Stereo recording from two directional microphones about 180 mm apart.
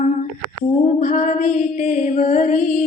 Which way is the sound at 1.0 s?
45° left (ahead or behind).